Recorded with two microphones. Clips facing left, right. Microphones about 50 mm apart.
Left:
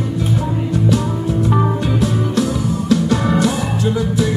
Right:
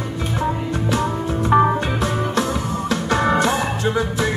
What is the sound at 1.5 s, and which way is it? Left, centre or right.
Music, right.